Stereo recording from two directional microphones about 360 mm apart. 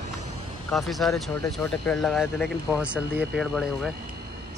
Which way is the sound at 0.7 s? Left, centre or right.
Centre.